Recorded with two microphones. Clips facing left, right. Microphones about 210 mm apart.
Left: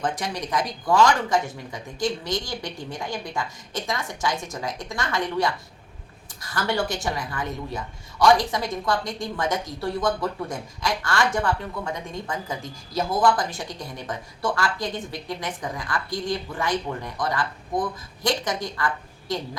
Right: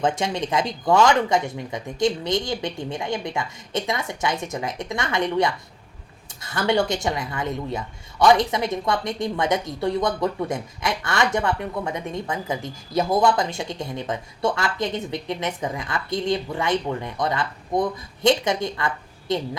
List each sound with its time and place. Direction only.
0.0 s speech: 25° right (ahead or behind)